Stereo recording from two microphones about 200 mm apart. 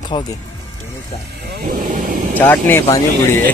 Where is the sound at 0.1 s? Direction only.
25° left (ahead or behind).